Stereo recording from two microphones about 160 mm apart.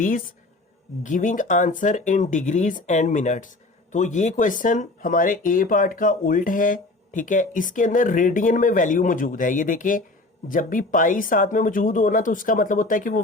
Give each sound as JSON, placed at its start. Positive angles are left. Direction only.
{"t": 1.0, "sound": "speech", "side_deg": 55}